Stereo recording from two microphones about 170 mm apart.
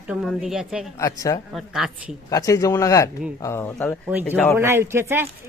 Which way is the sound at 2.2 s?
20° left (ahead or behind).